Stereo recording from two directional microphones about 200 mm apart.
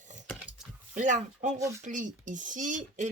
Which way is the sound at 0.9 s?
40° right (ahead or behind).